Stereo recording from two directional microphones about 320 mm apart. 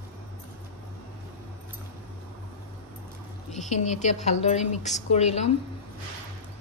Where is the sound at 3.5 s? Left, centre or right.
Left.